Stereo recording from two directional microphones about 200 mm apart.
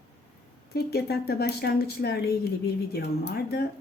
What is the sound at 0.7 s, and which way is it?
Speech, 50° left (ahead or behind).